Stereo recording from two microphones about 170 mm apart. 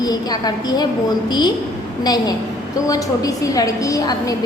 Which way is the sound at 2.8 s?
20° left (ahead or behind).